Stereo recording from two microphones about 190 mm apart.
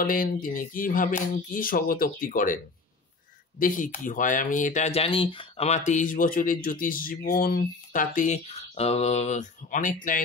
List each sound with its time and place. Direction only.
0.0 s speech: 50° left (ahead or behind)